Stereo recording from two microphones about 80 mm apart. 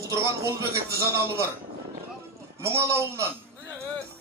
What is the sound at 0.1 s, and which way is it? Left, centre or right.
A man's voice, right.